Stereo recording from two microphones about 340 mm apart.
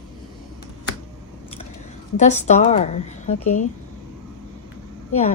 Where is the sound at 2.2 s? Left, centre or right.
Left.